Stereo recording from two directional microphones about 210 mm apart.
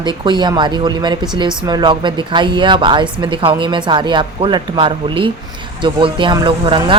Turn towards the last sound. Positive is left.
turn(degrees=-25)  # may be behind; listen again after turning